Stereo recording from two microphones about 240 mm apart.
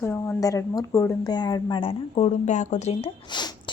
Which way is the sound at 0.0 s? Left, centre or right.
Centre.